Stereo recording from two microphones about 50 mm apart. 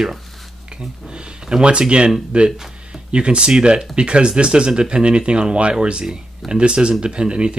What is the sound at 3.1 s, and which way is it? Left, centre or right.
Speech, centre.